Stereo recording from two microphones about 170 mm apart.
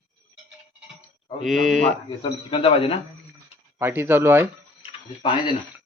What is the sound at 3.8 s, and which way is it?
Speech, 15° right (ahead or behind).